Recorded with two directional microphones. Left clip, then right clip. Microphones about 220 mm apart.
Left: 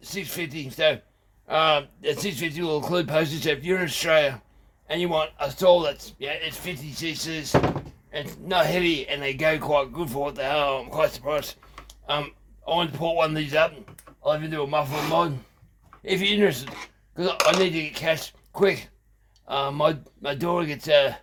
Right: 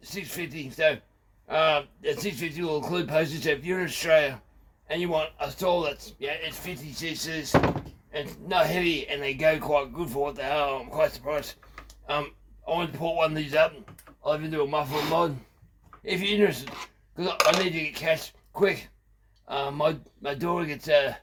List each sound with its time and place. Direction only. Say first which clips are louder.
0.0 s a man's voice: left 4 dB; 35° left (ahead or behind)